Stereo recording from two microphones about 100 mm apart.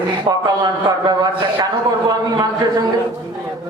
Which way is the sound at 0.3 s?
40° right (ahead or behind).